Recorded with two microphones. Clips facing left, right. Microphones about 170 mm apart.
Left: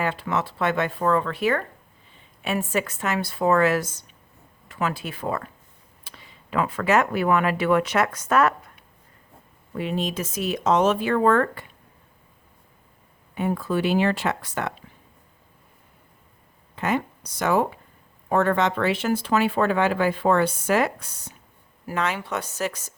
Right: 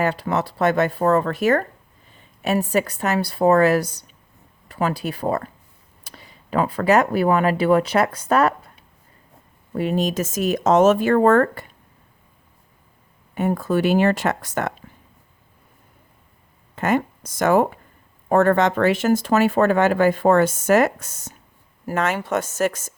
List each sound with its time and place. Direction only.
0.0 s speech: 40° right (ahead or behind)
13.3 s speech: 45° right (ahead or behind)
16.7 s speech: 45° right (ahead or behind)